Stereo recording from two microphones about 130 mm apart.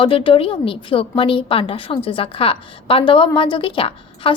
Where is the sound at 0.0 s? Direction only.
45° left (ahead or behind).